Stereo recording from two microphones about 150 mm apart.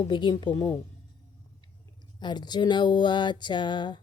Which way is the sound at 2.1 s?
30° left (ahead or behind).